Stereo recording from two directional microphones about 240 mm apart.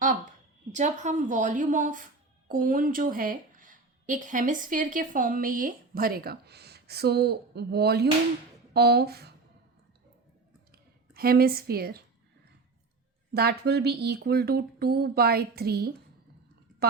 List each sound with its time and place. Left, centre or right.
0.0 s a woman's voice: right
10.7 s speech: right
13.3 s a woman's voice: right